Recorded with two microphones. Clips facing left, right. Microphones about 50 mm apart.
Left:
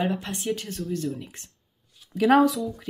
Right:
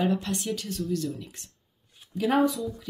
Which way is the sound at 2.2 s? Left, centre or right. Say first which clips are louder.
Left 5 dB; left.